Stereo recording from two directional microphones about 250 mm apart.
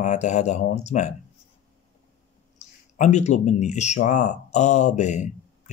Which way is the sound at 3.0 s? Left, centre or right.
Left.